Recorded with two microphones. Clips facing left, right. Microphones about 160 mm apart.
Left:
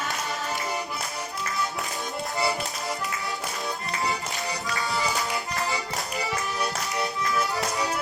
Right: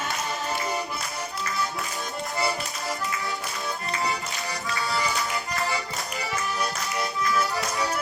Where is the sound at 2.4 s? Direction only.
20° left (ahead or behind).